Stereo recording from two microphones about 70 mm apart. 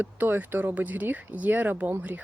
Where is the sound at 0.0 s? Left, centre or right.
Right.